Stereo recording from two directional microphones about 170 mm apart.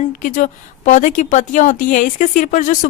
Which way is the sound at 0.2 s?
50° left (ahead or behind).